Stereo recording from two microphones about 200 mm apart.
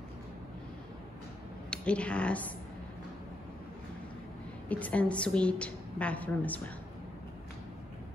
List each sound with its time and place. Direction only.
1.7 s speech: 5° left (ahead or behind)
4.6 s a woman's voice: 5° left (ahead or behind)